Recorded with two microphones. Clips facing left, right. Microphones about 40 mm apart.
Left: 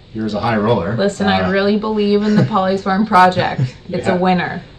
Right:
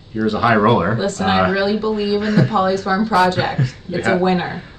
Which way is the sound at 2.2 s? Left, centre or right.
Right.